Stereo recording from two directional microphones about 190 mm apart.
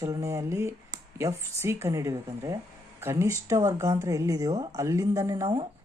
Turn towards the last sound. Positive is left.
turn(degrees=-15)  # may be behind; listen again after turning